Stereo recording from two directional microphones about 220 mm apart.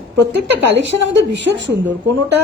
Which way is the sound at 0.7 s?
55° right (ahead or behind).